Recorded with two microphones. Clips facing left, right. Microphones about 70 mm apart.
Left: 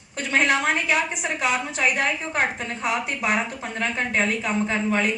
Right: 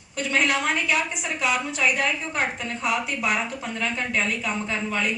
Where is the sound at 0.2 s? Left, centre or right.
Left.